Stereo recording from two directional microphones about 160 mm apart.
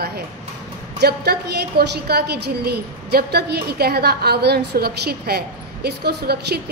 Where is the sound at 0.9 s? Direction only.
85° right.